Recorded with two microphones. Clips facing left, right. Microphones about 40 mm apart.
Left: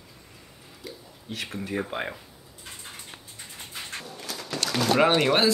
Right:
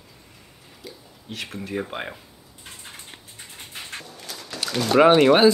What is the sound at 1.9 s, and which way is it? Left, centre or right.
Speech, centre.